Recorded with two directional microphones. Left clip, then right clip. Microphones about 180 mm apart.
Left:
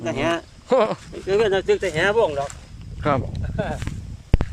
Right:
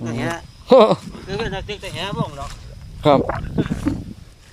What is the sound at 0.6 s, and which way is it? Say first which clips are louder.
Speech: right 8 dB; 20° right (ahead or behind).